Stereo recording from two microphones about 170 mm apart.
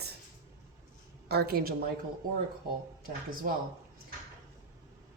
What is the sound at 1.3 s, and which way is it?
Speech, 65° right (ahead or behind).